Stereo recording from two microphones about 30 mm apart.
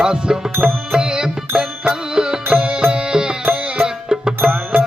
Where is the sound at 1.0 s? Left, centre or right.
Right.